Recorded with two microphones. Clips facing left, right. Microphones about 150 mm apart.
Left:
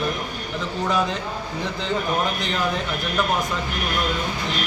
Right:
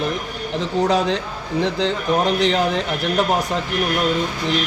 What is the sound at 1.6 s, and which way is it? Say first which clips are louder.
Speech: right 6 dB; 90° right.